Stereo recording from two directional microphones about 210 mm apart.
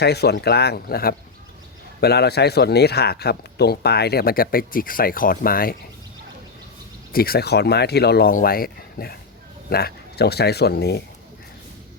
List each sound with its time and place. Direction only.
0.0 s speech: 50° left (ahead or behind)
7.1 s speech: 45° left (ahead or behind)